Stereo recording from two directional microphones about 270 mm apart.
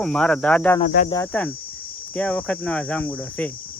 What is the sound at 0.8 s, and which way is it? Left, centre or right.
Cricket, left.